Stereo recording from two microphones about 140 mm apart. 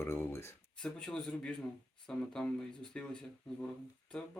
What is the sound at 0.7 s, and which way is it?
Speech, 5° left (ahead or behind).